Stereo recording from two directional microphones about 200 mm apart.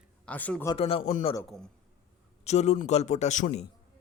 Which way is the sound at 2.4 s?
35° left (ahead or behind).